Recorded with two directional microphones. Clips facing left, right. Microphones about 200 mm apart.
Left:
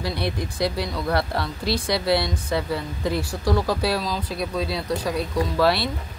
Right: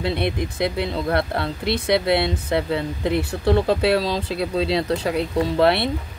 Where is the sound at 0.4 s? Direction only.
20° right (ahead or behind).